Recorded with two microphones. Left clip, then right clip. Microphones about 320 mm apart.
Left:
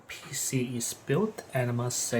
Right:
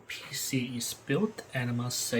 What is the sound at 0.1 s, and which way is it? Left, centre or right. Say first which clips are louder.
Speech: even; centre.